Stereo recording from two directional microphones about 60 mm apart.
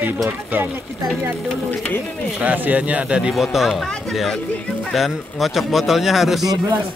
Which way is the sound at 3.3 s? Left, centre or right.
Centre.